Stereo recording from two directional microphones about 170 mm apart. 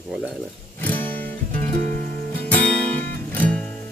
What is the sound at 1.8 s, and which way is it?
Music, 55° right (ahead or behind).